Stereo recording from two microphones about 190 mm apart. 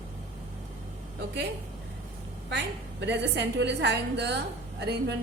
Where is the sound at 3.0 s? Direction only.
65° right (ahead or behind).